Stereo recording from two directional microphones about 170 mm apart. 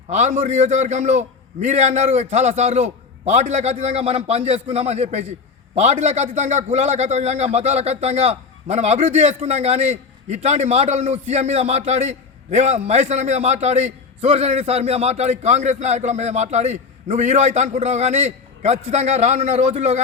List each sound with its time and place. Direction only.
0.1 s a man's voice: 40° right (ahead or behind)